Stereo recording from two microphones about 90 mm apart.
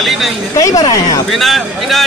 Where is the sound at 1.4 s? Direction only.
Centre (ahead or behind).